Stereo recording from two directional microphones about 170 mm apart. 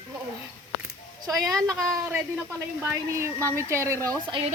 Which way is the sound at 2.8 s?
15° right (ahead or behind).